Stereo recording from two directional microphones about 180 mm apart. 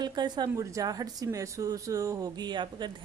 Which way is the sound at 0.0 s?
25° right (ahead or behind).